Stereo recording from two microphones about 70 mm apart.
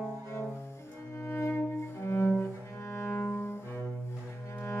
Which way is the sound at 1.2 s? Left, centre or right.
Left.